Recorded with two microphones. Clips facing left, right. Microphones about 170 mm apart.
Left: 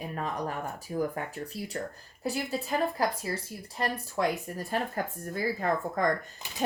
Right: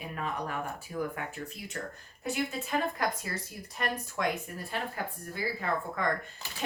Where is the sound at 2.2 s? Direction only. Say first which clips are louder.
Left 1 dB; 35° left (ahead or behind).